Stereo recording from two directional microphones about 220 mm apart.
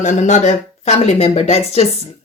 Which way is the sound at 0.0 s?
30° left (ahead or behind).